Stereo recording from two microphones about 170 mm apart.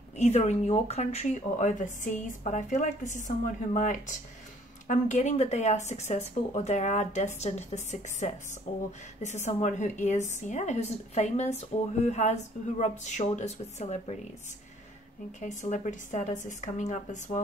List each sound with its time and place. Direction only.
0.2 s speech: 40° left (ahead or behind)
15.4 s speech: 45° left (ahead or behind)